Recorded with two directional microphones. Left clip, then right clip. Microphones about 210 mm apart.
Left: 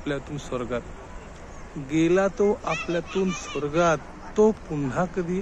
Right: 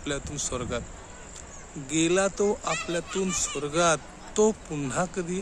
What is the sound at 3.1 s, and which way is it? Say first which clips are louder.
Speech: left 3 dB; 50° right (ahead or behind).